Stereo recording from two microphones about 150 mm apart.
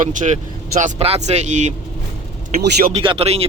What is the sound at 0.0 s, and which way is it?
Speech, 60° right (ahead or behind).